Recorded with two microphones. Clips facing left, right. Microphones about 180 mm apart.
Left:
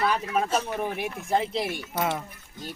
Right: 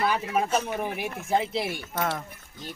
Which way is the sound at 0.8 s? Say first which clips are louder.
Left 1 dB; 5° right (ahead or behind).